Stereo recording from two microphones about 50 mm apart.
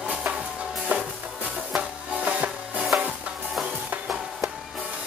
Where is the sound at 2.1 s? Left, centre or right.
Right.